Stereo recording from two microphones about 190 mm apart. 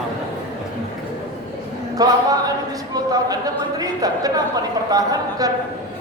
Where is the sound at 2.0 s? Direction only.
20° right (ahead or behind).